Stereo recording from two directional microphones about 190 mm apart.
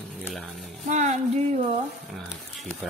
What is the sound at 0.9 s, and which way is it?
Speech, 40° right (ahead or behind).